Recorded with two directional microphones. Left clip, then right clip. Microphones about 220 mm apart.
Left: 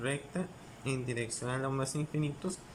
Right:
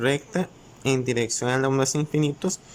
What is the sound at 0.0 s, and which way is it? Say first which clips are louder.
Speech: right 12 dB; 45° right (ahead or behind).